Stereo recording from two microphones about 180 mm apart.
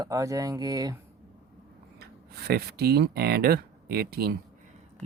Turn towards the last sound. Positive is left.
turn(degrees=-60)  # may be behind; listen again after turning